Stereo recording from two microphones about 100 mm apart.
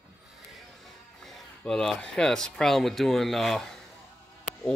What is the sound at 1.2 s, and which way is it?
Speech, 5° left (ahead or behind).